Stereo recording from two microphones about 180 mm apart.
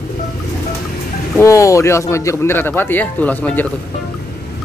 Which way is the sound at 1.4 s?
15° left (ahead or behind).